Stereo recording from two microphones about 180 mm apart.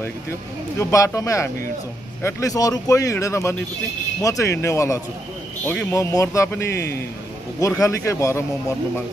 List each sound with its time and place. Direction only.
0.7 s speech: 15° left (ahead or behind)